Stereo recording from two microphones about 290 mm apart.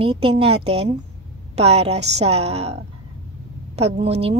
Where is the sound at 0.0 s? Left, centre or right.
Centre.